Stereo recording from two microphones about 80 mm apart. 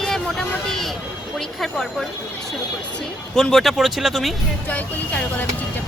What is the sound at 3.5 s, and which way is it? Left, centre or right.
Speech, centre.